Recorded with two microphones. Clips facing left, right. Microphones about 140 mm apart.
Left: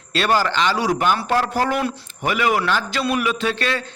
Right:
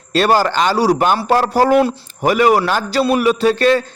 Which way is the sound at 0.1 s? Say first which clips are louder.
Right 5 dB; 40° right (ahead or behind).